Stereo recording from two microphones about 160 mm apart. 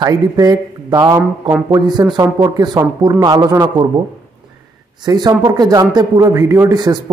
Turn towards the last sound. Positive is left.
turn(degrees=-25)  # may be behind; listen again after turning